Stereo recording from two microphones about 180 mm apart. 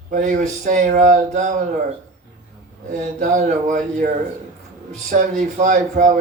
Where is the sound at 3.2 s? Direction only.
45° right (ahead or behind).